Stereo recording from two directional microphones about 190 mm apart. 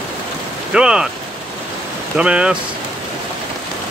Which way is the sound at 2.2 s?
5° right (ahead or behind).